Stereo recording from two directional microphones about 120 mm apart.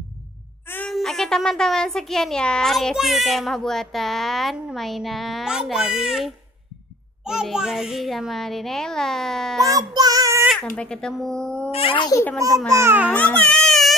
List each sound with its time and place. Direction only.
0.8 s speech: centre (ahead or behind)
9.6 s child singing: 30° right (ahead or behind)
10.5 s speech: 5° left (ahead or behind)
11.7 s a child's voice: 45° left (ahead or behind)
12.4 s a child's voice: 25° right (ahead or behind)
13.1 s baby cry: 10° left (ahead or behind)